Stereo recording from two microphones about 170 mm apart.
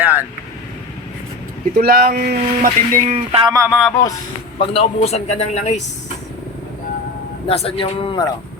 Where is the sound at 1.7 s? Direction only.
65° right (ahead or behind).